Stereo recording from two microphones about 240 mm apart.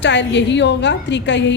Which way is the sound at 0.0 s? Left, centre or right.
Left.